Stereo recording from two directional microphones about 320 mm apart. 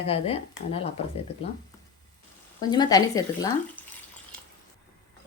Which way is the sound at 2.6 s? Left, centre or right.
Centre.